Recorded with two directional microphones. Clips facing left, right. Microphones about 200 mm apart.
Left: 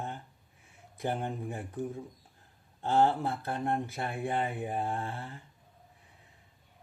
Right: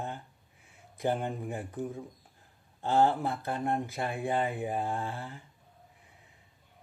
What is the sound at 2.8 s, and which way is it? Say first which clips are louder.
Speech: right 1 dB; 15° right (ahead or behind).